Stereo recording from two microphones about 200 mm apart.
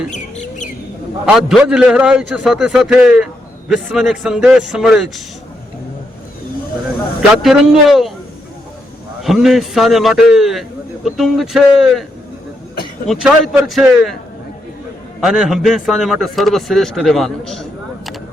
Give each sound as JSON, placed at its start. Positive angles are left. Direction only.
{"t": 0.1, "sound": "bird", "side_deg": 35}
{"t": 1.2, "sound": "a man's voice", "side_deg": 0}
{"t": 7.2, "sound": "a man's voice", "side_deg": 0}
{"t": 9.2, "sound": "a man's voice", "side_deg": 0}
{"t": 13.1, "sound": "a man's voice", "side_deg": 0}
{"t": 15.2, "sound": "a man's voice", "side_deg": -5}